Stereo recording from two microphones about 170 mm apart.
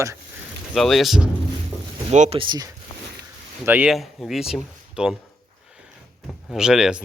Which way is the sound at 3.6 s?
10° right (ahead or behind).